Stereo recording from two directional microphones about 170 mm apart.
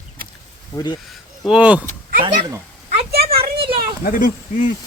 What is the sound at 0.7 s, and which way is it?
Speech, 25° left (ahead or behind).